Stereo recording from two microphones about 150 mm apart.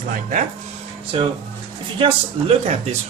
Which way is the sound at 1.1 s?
40° right (ahead or behind).